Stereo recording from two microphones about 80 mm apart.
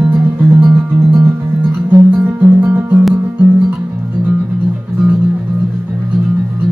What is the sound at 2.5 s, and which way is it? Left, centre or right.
Music, right.